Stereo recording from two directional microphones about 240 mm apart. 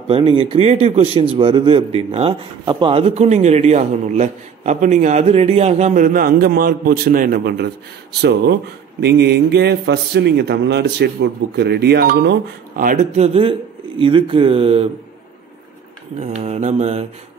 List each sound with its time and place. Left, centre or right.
0.1 s a man's voice: centre
16.2 s a man's voice: right